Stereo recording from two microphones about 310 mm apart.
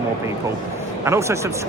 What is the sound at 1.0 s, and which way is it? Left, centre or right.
Speech, centre.